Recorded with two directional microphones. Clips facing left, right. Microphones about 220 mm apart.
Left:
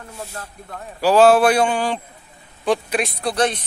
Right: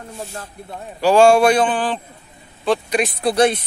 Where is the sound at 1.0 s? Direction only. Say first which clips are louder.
Right 1 dB; 5° left (ahead or behind).